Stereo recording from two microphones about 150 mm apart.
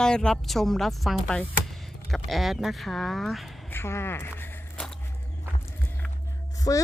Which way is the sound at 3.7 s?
15° left (ahead or behind).